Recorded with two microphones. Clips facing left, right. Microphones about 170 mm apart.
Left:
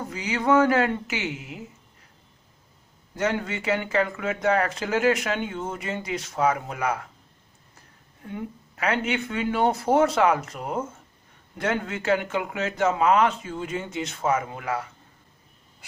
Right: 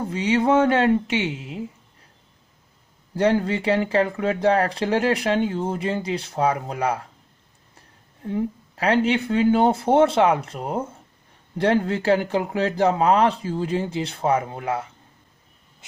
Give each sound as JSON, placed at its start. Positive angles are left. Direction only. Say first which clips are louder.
{"t": 0.0, "sound": "speech", "louder": "right 6 dB", "side_deg": -30}
{"t": 3.2, "sound": "speech", "louder": "right 7 dB", "side_deg": -30}
{"t": 8.2, "sound": "speech", "louder": "right 9 dB", "side_deg": -30}